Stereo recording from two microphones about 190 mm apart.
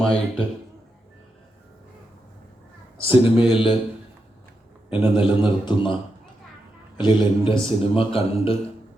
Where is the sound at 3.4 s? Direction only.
25° left (ahead or behind).